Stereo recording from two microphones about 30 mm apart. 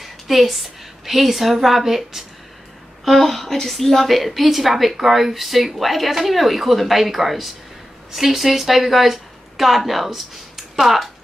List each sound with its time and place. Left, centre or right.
0.0 s a woman's voice: centre
3.1 s a woman's voice: centre